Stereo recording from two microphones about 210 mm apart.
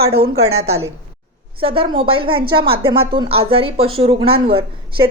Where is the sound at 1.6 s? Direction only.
25° right (ahead or behind).